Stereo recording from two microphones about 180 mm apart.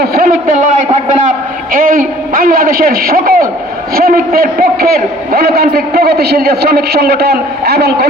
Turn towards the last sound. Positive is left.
turn(degrees=-65)  # may be behind; listen again after turning